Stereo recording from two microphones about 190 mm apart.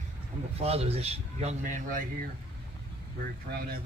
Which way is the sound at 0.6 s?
35° right (ahead or behind).